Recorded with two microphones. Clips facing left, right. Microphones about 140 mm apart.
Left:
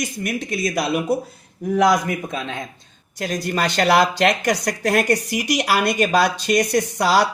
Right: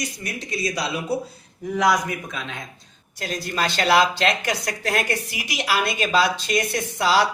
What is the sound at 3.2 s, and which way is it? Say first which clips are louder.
Speech: left 4 dB; 45° left (ahead or behind).